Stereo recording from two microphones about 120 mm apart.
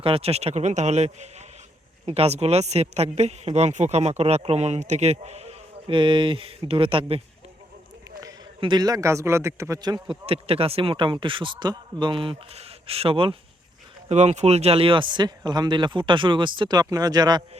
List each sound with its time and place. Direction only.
0.0 s a man's voice: 55° right (ahead or behind)
2.0 s speech: 60° right (ahead or behind)
5.9 s a man's voice: 45° right (ahead or behind)
8.6 s a man's voice: 35° right (ahead or behind)
10.1 s a man's voice: 50° right (ahead or behind)
14.1 s speech: 70° right (ahead or behind); by 17.4 s 35° right (ahead or behind)